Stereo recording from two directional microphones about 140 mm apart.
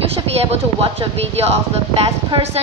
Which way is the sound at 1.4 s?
50° right (ahead or behind).